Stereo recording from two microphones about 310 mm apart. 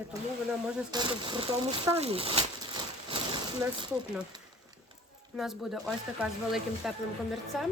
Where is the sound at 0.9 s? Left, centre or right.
Centre.